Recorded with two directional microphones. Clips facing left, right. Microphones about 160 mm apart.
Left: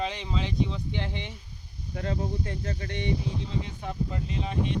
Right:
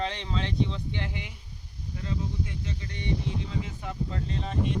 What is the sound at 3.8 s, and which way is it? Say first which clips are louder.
Speech: left 1 dB; 20° left (ahead or behind).